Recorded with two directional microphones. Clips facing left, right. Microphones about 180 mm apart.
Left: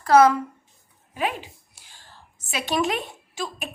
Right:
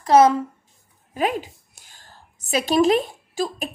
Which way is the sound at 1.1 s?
40° right (ahead or behind).